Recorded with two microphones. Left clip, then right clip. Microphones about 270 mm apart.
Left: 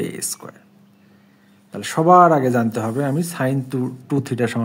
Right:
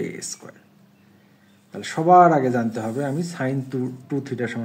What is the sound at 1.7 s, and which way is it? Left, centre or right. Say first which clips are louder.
Speech: left 2 dB; left.